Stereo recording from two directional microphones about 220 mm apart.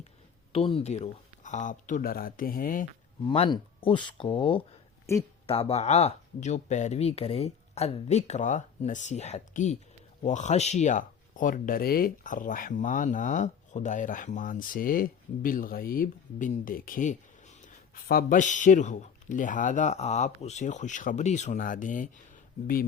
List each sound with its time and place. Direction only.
0.5 s speech: 25° left (ahead or behind)
3.2 s speech: 25° left (ahead or behind); by 22.9 s 40° left (ahead or behind)